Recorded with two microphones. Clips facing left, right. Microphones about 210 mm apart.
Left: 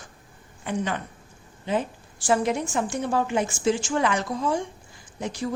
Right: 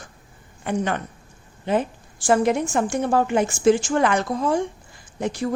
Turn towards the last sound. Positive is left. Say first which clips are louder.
# right 5 dB
turn(degrees=-60)  # may be behind; listen again after turning